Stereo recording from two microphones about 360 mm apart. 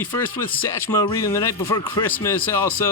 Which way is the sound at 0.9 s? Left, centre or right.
Centre.